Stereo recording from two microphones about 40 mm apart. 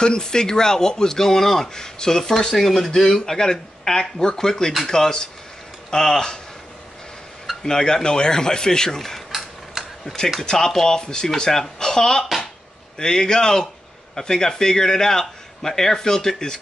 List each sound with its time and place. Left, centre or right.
0.0 s speech: centre
7.6 s speech: centre
9.3 s tick-tock: centre
10.4 s speech: centre